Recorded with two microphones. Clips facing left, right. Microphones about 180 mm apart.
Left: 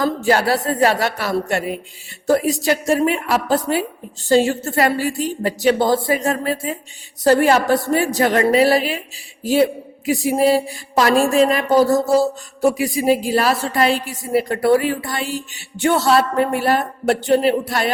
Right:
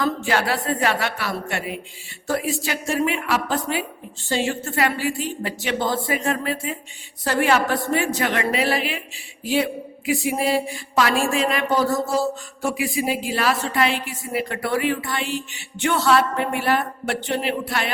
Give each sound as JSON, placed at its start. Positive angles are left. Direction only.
{"t": 0.0, "sound": "a woman's voice", "side_deg": 40}